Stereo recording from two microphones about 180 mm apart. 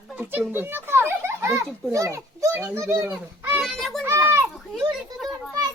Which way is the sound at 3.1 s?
10° right (ahead or behind).